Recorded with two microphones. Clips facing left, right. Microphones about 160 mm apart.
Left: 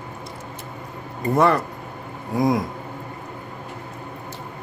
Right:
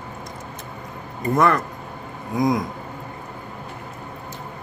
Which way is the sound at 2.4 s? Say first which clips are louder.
Even; 30° left (ahead or behind).